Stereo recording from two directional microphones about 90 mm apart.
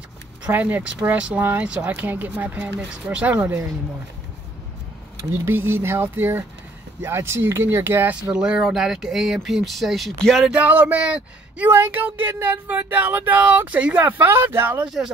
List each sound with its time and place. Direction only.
0.4 s speech: 20° right (ahead or behind)
5.1 s speech: 30° right (ahead or behind)
8.3 s speech: 10° right (ahead or behind)
10.5 s speech: 20° right (ahead or behind)